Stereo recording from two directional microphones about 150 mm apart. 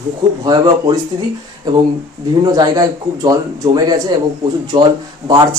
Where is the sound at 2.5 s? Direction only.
25° right (ahead or behind).